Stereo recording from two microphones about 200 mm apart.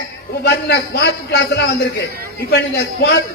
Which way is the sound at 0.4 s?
55° left (ahead or behind).